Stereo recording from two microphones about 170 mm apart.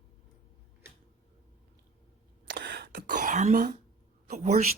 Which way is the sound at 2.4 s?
80° right.